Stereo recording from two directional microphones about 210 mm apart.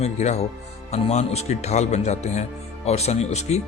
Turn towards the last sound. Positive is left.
turn(degrees=30)  # may be behind; listen again after turning